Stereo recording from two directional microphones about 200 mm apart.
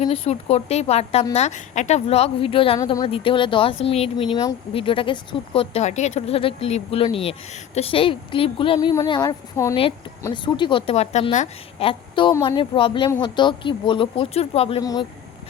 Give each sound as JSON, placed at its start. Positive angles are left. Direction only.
{"t": 0.0, "sound": "a woman's voice", "side_deg": 30}